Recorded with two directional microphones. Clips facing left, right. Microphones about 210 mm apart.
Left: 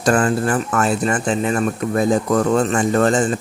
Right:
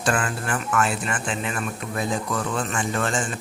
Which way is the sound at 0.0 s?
40° left (ahead or behind).